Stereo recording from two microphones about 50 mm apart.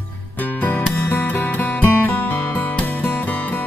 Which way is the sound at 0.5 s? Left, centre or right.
Left.